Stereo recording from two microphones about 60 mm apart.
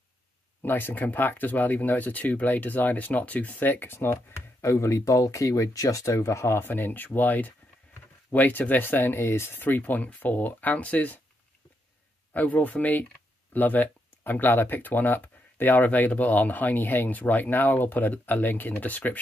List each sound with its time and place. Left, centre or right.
0.6 s speech: left
6.6 s speech: left
12.4 s speech: left